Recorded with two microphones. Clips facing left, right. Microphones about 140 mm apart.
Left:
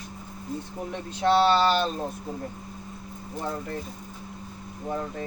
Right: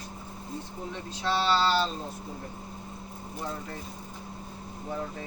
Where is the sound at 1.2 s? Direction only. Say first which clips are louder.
Left 6 dB; 55° left (ahead or behind).